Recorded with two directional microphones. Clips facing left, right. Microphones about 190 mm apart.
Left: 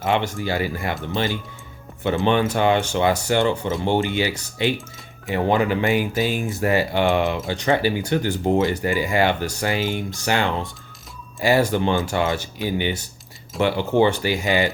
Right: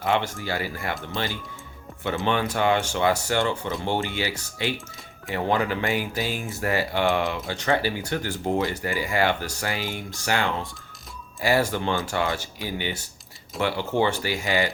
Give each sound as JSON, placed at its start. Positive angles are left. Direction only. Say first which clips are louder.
{"t": 0.0, "sound": "speech", "louder": "left 3 dB", "side_deg": 15}